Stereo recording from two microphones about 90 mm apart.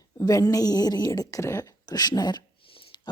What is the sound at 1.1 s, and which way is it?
Speech, 35° left (ahead or behind).